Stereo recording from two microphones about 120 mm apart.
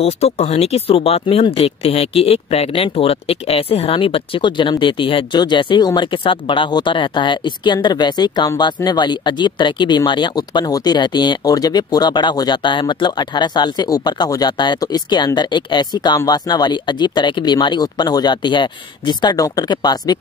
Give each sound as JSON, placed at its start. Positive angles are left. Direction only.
{"t": 0.0, "sound": "speech", "side_deg": 65}